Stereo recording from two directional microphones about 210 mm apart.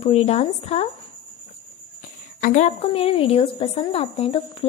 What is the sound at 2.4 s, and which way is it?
A woman's voice, 35° left (ahead or behind).